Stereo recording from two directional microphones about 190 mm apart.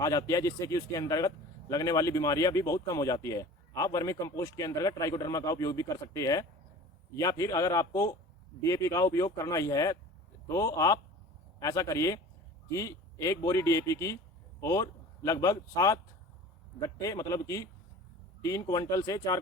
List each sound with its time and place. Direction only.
0.0 s speech: 15° left (ahead or behind)